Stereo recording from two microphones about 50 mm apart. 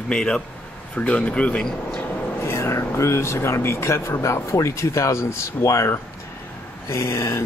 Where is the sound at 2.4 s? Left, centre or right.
Left.